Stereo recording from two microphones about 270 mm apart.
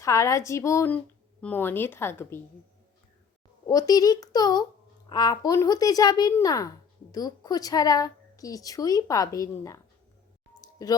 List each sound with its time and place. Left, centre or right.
0.0 s speech: centre
3.7 s speech: centre
10.6 s a sound: centre